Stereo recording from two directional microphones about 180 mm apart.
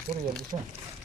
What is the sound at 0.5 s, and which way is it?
Speech, 30° right (ahead or behind).